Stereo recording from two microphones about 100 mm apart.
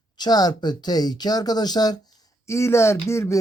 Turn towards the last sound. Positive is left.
turn(degrees=25)  # may be behind; listen again after turning